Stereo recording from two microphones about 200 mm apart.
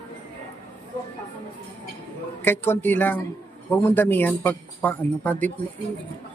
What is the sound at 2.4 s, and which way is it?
A man's voice, 10° left (ahead or behind).